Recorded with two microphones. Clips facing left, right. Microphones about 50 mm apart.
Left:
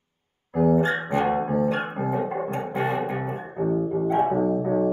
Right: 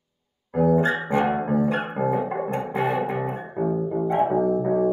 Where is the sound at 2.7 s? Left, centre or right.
Centre.